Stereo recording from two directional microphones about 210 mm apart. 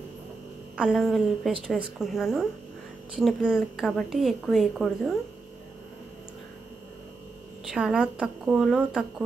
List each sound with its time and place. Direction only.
0.7 s a woman's voice: centre (ahead or behind)
7.7 s a woman's voice: 5° right (ahead or behind)